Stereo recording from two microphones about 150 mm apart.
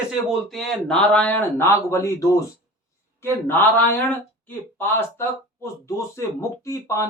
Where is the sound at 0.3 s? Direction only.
Centre (ahead or behind).